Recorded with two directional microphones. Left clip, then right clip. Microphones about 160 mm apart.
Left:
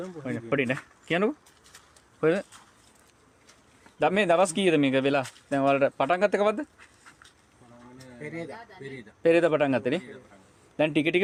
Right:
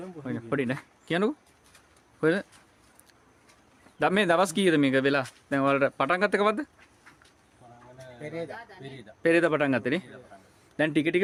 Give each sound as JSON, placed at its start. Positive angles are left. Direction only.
{"t": 0.2, "sound": "speech", "side_deg": -5}
{"t": 4.0, "sound": "speech", "side_deg": -20}
{"t": 8.2, "sound": "speech", "side_deg": -15}